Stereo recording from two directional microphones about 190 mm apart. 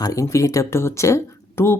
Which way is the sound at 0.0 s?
15° left (ahead or behind).